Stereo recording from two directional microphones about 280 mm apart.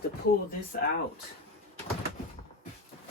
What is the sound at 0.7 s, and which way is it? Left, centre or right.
Speech, left.